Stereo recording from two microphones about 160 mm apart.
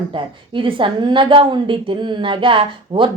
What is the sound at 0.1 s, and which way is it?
A woman's voice, 30° right (ahead or behind).